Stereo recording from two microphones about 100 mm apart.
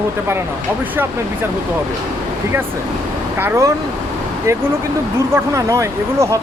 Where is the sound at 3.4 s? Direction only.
25° right (ahead or behind).